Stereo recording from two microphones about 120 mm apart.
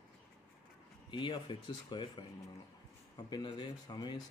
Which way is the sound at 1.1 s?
40° left (ahead or behind).